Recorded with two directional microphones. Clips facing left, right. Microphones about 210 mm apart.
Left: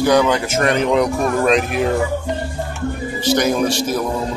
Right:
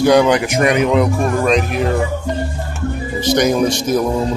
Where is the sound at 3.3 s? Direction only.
5° left (ahead or behind).